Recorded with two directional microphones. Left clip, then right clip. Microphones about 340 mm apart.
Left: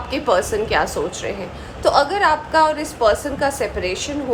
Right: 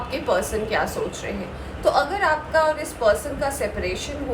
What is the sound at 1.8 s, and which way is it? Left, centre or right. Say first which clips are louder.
A woman's voice: left 4 dB; left.